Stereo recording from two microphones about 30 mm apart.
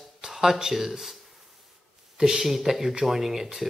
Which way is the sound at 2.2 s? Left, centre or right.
Centre.